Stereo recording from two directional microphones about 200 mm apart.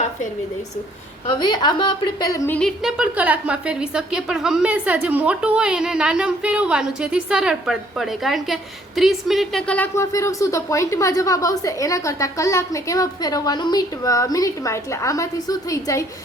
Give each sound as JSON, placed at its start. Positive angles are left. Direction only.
{"t": 1.4, "sound": "a woman's voice", "side_deg": 20}
{"t": 2.5, "sound": "a woman's voice", "side_deg": 5}